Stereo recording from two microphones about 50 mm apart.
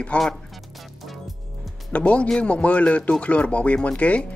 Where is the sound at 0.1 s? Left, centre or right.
Left.